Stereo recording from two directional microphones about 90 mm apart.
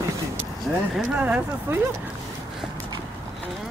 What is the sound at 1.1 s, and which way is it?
Speech, 15° right (ahead or behind).